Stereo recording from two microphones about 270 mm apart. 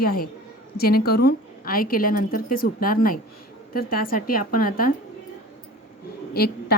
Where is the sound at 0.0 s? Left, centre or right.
Left.